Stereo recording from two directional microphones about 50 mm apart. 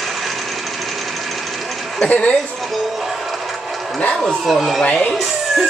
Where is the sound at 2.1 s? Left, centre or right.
Left.